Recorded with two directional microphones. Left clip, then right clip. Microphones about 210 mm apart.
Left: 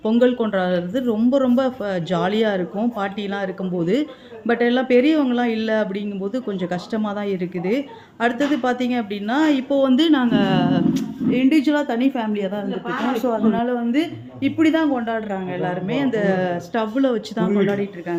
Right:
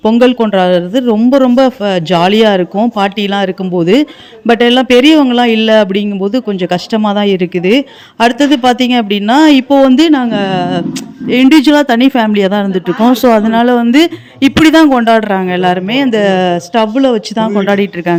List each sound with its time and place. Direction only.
0.0 s speech: 35° right (ahead or behind)
11.3 s speech: 45° right (ahead or behind)